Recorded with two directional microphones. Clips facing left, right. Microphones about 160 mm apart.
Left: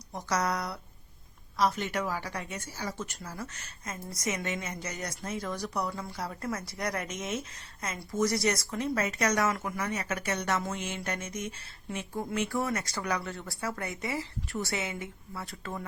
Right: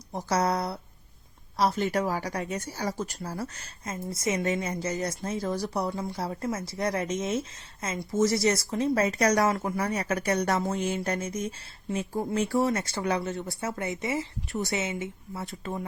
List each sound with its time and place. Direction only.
0.1 s speech: 30° right (ahead or behind)